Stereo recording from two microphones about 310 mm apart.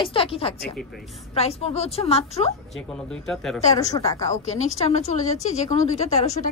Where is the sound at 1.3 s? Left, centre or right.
Centre.